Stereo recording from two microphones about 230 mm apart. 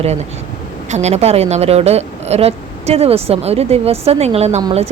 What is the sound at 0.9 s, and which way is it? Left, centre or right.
A woman's voice, right.